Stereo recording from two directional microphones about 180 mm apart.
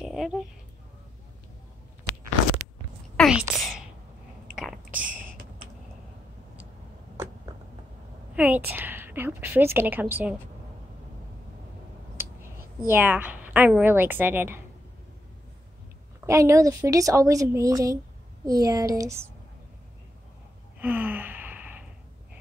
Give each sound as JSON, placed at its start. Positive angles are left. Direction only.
{"t": 0.0, "sound": "a sound", "side_deg": 0}
{"t": 3.2, "sound": "a woman's voice", "side_deg": 0}
{"t": 4.6, "sound": "a sound", "side_deg": -5}
{"t": 8.4, "sound": "a woman's voice", "side_deg": -10}
{"t": 12.8, "sound": "a woman's voice", "side_deg": -10}
{"t": 16.3, "sound": "a woman's voice", "side_deg": -15}
{"t": 20.8, "sound": "sigh", "side_deg": -10}